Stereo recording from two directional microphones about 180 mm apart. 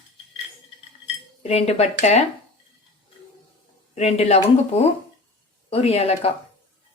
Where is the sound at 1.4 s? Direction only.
35° left (ahead or behind).